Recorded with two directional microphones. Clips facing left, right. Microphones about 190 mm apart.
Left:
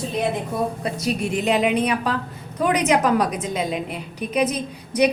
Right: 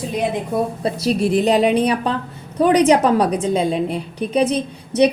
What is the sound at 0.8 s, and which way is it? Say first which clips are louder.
A woman's voice: right 5 dB; 35° right (ahead or behind).